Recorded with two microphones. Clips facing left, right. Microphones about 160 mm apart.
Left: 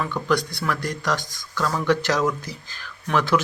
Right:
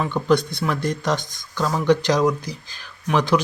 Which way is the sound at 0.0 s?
25° right (ahead or behind).